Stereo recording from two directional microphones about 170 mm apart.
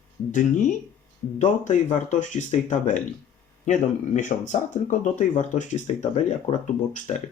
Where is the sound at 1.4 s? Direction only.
45° left (ahead or behind).